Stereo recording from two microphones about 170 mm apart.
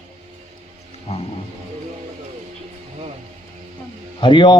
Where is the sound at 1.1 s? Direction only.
35° left (ahead or behind).